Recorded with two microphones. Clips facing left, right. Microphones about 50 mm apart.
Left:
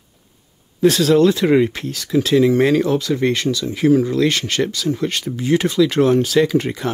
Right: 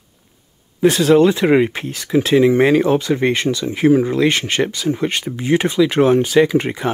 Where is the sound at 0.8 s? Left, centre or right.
Centre.